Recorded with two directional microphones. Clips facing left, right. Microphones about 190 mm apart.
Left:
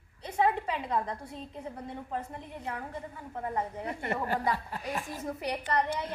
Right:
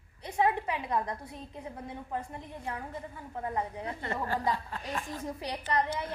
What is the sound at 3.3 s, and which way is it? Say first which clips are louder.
Speech: even; 10° right (ahead or behind).